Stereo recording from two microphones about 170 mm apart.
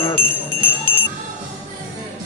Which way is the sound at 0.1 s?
55° left (ahead or behind).